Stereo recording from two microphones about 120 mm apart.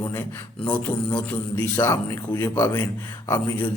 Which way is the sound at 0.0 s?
20° left (ahead or behind).